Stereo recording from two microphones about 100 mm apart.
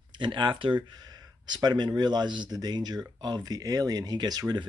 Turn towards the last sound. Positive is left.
turn(degrees=-40)  # may be behind; listen again after turning